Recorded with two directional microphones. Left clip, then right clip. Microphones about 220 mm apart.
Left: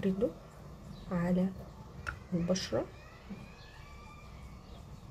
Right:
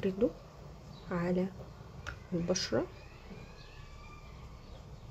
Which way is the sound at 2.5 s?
20° right (ahead or behind).